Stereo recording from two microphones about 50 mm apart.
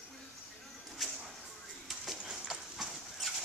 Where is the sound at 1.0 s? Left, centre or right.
Centre.